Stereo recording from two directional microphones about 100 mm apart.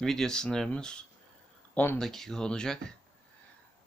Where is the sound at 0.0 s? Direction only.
5° left (ahead or behind).